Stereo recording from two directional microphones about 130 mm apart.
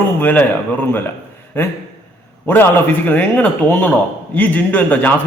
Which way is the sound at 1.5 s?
15° left (ahead or behind).